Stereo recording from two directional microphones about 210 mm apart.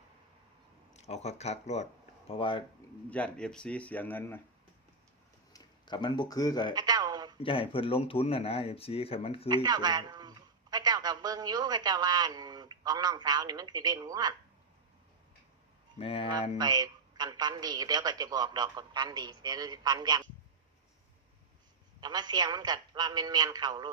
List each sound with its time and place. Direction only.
0.9 s speech: 30° left (ahead or behind)
3.1 s a man's voice: 5° left (ahead or behind)
5.5 s speech: 20° left (ahead or behind)
6.7 s a sound: 20° right (ahead or behind)
7.3 s speech: 25° left (ahead or behind)
9.6 s a man's voice: 20° right (ahead or behind)
16.0 s speech: 30° left (ahead or behind)
16.6 s a man's voice: 20° right (ahead or behind)
22.0 s a man's voice: 20° right (ahead or behind)